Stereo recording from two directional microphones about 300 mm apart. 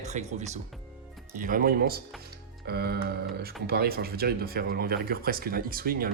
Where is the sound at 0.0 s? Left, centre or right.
Right.